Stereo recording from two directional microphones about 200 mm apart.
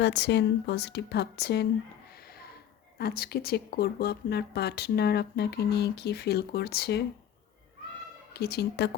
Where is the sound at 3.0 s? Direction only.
50° left (ahead or behind).